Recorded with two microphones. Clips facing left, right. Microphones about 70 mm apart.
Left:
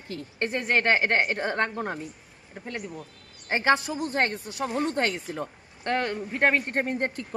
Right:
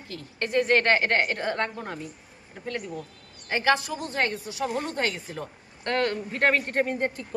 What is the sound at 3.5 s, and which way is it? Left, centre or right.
A woman's voice, left.